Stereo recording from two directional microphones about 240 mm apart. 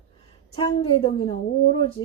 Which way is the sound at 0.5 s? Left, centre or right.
Centre.